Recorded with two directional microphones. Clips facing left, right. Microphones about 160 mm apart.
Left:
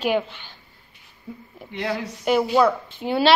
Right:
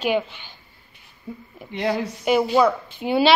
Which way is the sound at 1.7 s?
20° right (ahead or behind).